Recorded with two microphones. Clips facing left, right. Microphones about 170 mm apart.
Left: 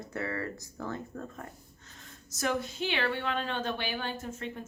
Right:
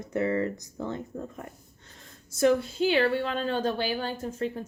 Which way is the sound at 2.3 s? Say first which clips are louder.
Right 9 dB; 30° right (ahead or behind).